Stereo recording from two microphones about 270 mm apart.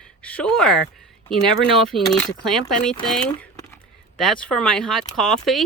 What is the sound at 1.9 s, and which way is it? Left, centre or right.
Speech, centre.